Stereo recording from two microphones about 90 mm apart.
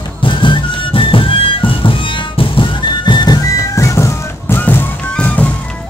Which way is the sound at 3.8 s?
35° left (ahead or behind).